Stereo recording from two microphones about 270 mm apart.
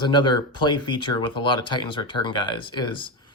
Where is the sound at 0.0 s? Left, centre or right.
Centre.